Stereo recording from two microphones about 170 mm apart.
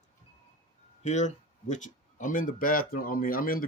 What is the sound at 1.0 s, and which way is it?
Speech, 45° left (ahead or behind).